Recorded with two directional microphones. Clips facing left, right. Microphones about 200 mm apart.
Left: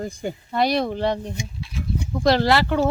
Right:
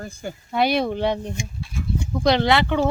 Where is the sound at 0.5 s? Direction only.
Centre (ahead or behind).